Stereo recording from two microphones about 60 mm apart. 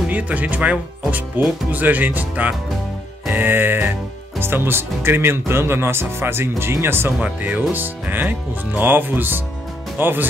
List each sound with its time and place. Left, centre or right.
0.1 s speech: right
7.2 s speech: right